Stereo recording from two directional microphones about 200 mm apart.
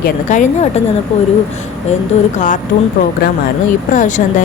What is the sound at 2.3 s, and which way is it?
Speech, 40° left (ahead or behind).